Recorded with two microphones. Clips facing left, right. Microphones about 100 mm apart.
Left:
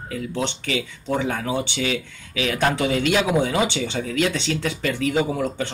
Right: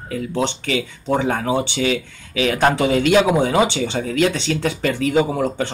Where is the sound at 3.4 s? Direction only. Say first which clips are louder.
Right 5 dB; 35° right (ahead or behind).